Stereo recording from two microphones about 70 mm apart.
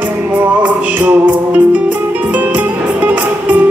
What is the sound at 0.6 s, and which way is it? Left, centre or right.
Music, right.